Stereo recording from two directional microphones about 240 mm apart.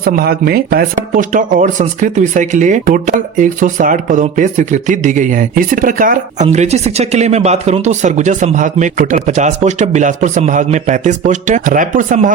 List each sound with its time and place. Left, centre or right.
0.0 s speech: right